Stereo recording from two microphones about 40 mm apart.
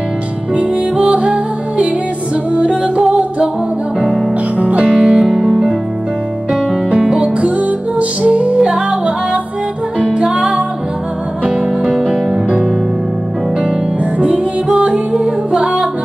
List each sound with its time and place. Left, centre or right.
0.6 s music: right
2.5 s music: right
4.6 s music: right
4.9 s music: centre
5.2 s music: centre
6.9 s music: right
8.5 s music: centre
11.9 s music: centre
14.2 s music: right